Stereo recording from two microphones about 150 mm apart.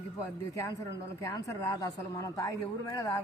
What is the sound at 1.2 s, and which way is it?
Speech, 20° left (ahead or behind).